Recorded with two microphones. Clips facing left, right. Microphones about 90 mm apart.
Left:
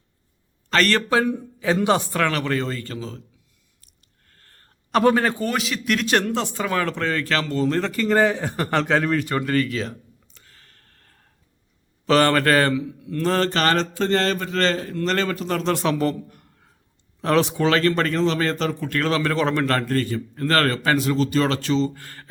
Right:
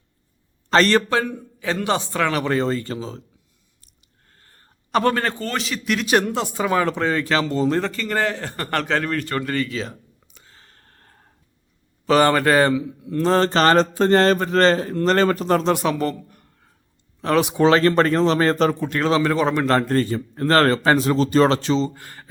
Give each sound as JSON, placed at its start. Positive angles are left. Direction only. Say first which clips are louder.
{"t": 0.7, "sound": "a man's voice", "louder": "right 3 dB", "side_deg": -30}
{"t": 1.1, "sound": "a man's voice", "louder": "left 2 dB", "side_deg": 5}
{"t": 2.1, "sound": "speech", "louder": "right 1 dB", "side_deg": -5}
{"t": 2.4, "sound": "speech", "louder": "right 4 dB", "side_deg": -25}
{"t": 4.3, "sound": "a sound", "louder": "right 1 dB", "side_deg": -10}
{"t": 5.6, "sound": "speech", "louder": "even", "side_deg": 0}
{"t": 7.9, "sound": "a man's voice", "louder": "left 4 dB", "side_deg": 10}
{"t": 10.4, "sound": "a sound", "louder": "right 6 dB", "side_deg": -25}
{"t": 12.0, "sound": "a man's voice", "louder": "right 1 dB", "side_deg": -10}
{"t": 15.6, "sound": "a man's voice", "louder": "right 1 dB", "side_deg": -10}
{"t": 17.6, "sound": "a man's voice", "louder": "right 4 dB", "side_deg": -30}
{"t": 18.9, "sound": "speech", "louder": "right 3 dB", "side_deg": -20}
{"t": 19.8, "sound": "a man's voice", "louder": "right 3 dB", "side_deg": -30}